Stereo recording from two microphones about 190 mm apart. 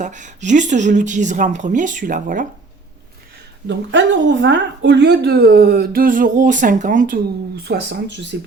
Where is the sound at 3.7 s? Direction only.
70° right (ahead or behind).